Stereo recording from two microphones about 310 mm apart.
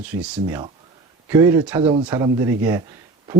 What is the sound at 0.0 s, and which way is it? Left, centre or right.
Speech, centre.